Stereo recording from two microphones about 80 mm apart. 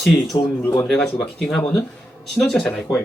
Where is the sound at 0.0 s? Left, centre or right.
Centre.